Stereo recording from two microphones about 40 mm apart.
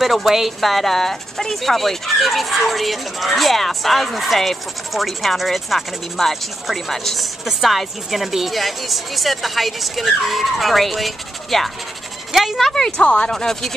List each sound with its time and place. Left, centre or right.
0.0 s speech: centre
12.9 s speech: left
13.3 s speech: centre